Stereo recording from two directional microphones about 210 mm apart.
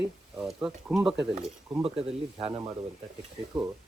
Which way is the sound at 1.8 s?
25° right (ahead or behind).